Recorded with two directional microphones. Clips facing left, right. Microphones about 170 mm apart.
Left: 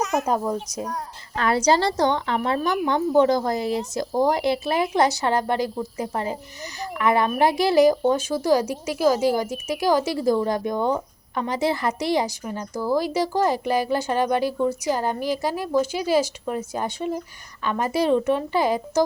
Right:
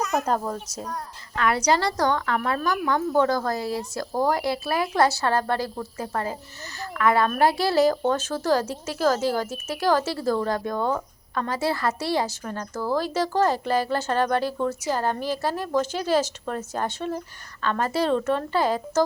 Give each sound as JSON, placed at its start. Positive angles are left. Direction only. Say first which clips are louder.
{"t": 0.1, "sound": "speech", "louder": "left 2 dB", "side_deg": 10}
{"t": 1.4, "sound": "a woman's voice", "louder": "left 2 dB", "side_deg": 30}